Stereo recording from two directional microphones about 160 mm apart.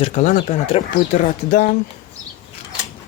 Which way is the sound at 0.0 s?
45° left (ahead or behind).